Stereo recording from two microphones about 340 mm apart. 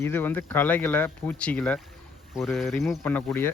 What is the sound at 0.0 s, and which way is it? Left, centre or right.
Speech, centre.